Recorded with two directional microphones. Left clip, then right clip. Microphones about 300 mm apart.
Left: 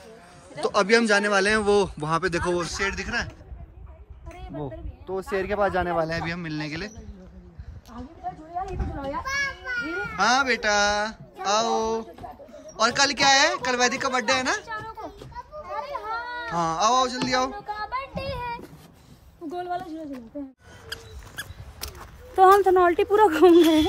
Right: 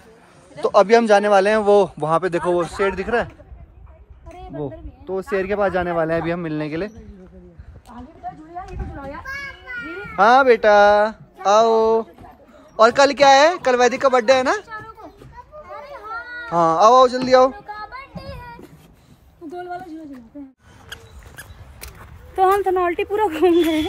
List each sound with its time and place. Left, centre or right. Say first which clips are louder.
0.6 s a man's voice: right 7 dB; centre
4.3 s a sound: right 6 dB; centre
5.1 s a man's voice: right 5 dB; centre
8.5 s a sound: left 2 dB; left
10.0 s a man's voice: right 10 dB; centre
15.6 s children playing: left 3 dB; centre
16.4 s a man's voice: right 10 dB; centre
21.4 s rodents: left 3 dB; centre
21.9 s speech: even; centre